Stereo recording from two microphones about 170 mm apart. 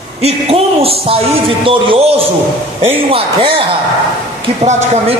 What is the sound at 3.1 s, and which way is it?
Speech, 30° right (ahead or behind).